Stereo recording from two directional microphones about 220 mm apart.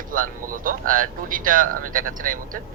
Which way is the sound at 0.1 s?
40° right (ahead or behind).